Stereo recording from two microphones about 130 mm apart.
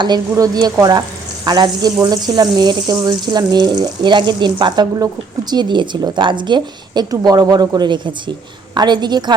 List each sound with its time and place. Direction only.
0.0 s a woman's voice: 30° right (ahead or behind)